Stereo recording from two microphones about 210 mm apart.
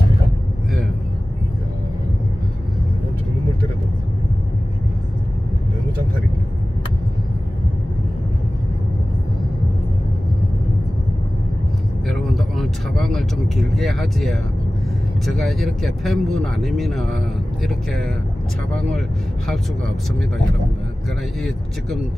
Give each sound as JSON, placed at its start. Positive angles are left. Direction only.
{"t": 12.1, "sound": "vehicle", "side_deg": 0}
{"t": 15.2, "sound": "speech", "side_deg": 0}